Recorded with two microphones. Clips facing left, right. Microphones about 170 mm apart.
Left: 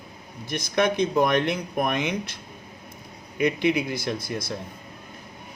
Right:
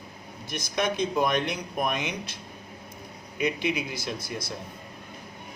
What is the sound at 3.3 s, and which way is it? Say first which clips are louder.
Speech: left 5 dB; 55° left (ahead or behind).